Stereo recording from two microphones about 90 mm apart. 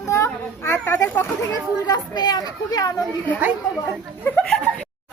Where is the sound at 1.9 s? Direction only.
50° left (ahead or behind).